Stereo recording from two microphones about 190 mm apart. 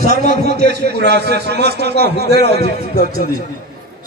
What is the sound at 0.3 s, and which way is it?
A man's voice, 60° right (ahead or behind).